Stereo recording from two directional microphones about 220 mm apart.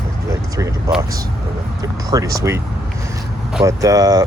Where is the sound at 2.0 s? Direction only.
15° right (ahead or behind).